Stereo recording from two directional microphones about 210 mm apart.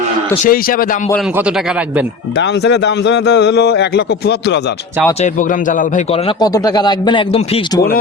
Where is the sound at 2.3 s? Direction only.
55° left (ahead or behind).